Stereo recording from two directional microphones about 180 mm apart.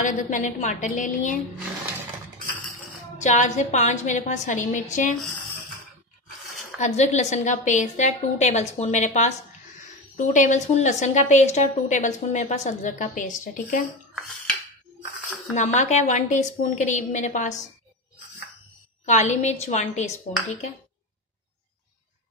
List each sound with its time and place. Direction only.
0.0 s a woman's voice: 45° left (ahead or behind)
3.2 s a woman's voice: 40° left (ahead or behind)
6.8 s a woman's voice: 40° left (ahead or behind)
15.5 s a woman's voice: 40° left (ahead or behind)
19.0 s a woman's voice: 40° left (ahead or behind)